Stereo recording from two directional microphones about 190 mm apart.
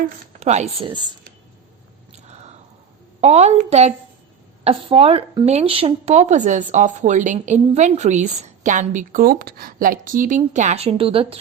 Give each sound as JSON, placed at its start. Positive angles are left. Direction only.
{"t": 0.3, "sound": "speech", "side_deg": -35}
{"t": 2.1, "sound": "a sound", "side_deg": -35}
{"t": 3.2, "sound": "speech", "side_deg": -35}